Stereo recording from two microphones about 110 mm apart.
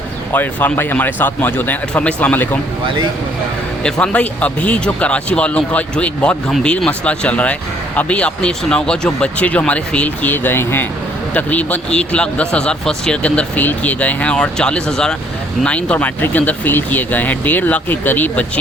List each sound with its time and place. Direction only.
0.3 s speech: 15° left (ahead or behind)
4.0 s speech: 10° left (ahead or behind)